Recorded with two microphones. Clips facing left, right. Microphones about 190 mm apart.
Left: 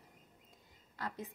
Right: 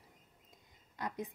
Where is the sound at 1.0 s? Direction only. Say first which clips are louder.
Right 3 dB; 15° right (ahead or behind).